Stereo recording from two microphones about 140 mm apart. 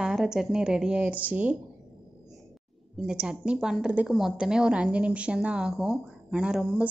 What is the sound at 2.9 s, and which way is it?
A woman's voice, 5° right (ahead or behind).